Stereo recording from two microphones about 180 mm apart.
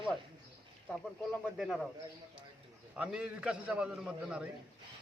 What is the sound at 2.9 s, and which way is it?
A man's voice, 5° right (ahead or behind).